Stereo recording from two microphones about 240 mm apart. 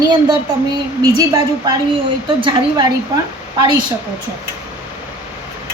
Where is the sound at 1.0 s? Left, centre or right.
Centre.